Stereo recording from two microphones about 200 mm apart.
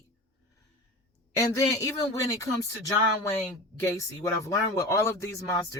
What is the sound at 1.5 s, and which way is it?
Speech, 15° left (ahead or behind).